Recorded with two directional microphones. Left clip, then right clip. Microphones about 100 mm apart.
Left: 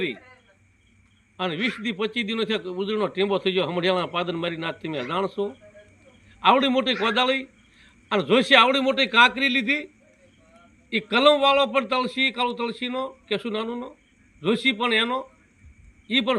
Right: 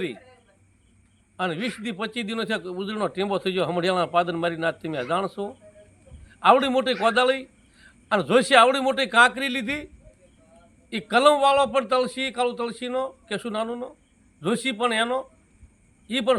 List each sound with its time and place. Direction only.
1.4 s a man's voice: 40° right (ahead or behind)